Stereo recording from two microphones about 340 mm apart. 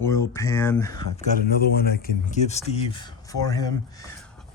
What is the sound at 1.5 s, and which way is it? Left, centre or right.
Speech, left.